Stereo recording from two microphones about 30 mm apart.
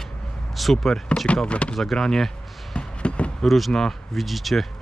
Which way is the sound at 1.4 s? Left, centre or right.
Left.